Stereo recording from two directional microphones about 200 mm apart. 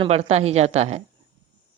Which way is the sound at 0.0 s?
30° right (ahead or behind).